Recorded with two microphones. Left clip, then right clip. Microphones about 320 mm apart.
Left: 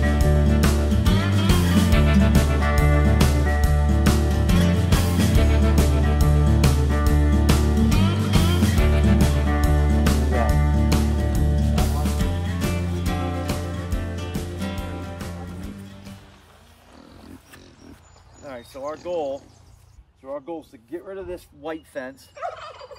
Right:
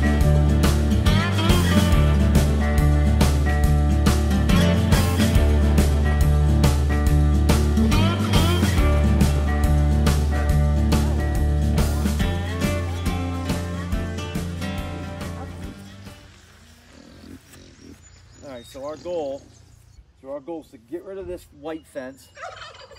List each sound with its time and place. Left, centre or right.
0.0 s music: centre
18.7 s a sound: centre
20.2 s speech: centre
22.4 s gobble: centre